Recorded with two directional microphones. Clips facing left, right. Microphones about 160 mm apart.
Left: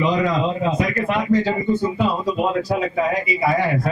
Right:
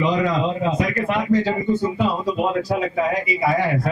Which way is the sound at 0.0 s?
15° left (ahead or behind).